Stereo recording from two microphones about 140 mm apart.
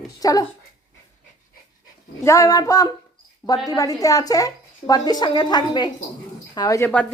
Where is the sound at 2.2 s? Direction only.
20° left (ahead or behind).